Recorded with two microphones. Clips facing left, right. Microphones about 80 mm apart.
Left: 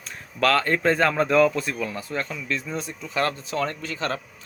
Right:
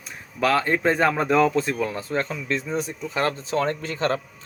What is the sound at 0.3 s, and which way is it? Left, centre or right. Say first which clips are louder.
Speech: even; centre.